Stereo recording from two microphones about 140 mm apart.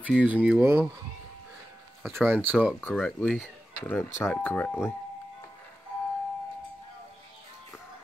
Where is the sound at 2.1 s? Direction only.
15° right (ahead or behind).